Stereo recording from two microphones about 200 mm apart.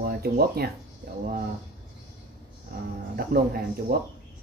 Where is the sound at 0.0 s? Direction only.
50° right (ahead or behind).